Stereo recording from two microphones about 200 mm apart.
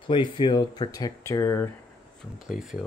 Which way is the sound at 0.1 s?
25° left (ahead or behind).